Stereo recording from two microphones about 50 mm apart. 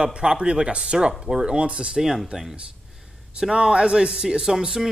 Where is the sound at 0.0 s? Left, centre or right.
Centre.